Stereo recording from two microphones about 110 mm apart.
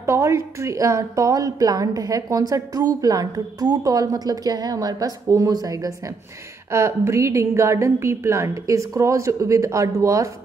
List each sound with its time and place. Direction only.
0.0 s a woman's voice: 25° right (ahead or behind)